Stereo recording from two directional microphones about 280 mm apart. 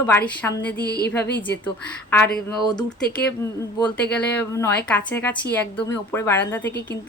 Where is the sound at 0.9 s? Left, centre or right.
Left.